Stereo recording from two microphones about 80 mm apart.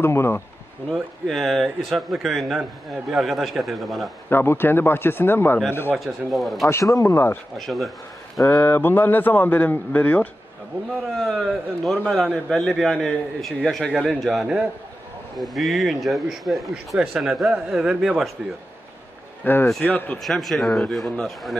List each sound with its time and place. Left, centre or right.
0.0 s speech: left
0.8 s a man's voice: centre
4.3 s a man's voice: left
5.9 s a man's voice: centre
6.7 s speech: left
7.5 s a man's voice: centre
8.5 s a man's voice: left
11.1 s a man's voice: centre
19.4 s a man's voice: left
20.2 s a man's voice: centre